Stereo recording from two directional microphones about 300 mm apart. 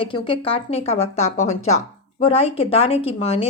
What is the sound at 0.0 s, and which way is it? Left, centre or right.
A woman's voice, centre.